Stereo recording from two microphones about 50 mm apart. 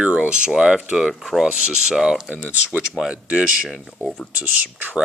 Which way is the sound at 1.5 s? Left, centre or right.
Centre.